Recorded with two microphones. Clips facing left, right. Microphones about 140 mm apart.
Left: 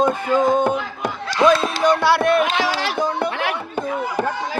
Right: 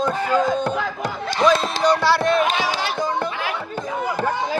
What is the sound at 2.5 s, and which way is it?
Speech, 85° left.